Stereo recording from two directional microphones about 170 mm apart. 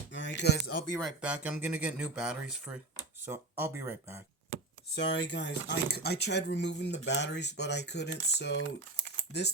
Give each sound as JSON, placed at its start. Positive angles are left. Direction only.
{"t": 0.1, "sound": "a sound", "side_deg": 90}
{"t": 0.9, "sound": "speech", "side_deg": -5}
{"t": 4.9, "sound": "speech", "side_deg": 85}